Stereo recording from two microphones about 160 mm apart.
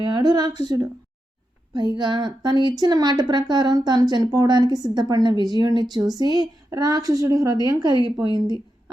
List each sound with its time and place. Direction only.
0.0 s a woman's voice: 25° right (ahead or behind)